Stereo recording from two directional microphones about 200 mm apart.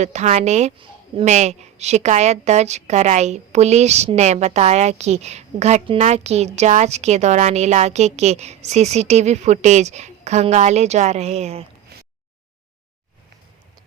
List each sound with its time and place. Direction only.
0.0 s a woman's voice: 35° right (ahead or behind)